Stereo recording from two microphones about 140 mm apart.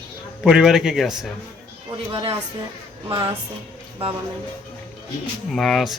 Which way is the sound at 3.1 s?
35° right (ahead or behind).